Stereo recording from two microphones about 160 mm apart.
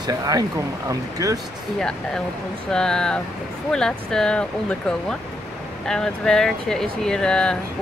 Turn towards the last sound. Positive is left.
turn(degrees=5)  # may be behind; listen again after turning